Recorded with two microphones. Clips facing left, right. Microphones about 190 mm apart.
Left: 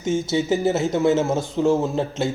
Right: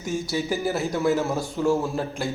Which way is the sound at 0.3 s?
20° left (ahead or behind).